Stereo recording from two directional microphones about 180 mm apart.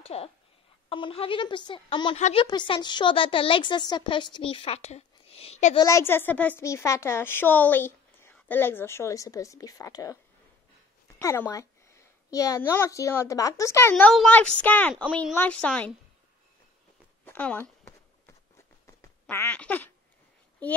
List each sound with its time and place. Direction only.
0.0 s a woman's voice: 35° left (ahead or behind)
2.1 s a woman's voice: 40° left (ahead or behind)
2.4 s a woman's voice: 25° left (ahead or behind)
5.8 s a woman's voice: 15° left (ahead or behind)
11.1 s a woman's voice: 15° left (ahead or behind)
17.2 s speech: 10° left (ahead or behind)
19.2 s a woman's voice: 10° left (ahead or behind)